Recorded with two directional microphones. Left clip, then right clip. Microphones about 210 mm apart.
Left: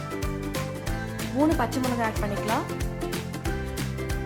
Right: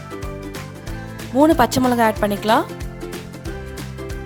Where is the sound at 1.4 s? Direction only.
45° right (ahead or behind).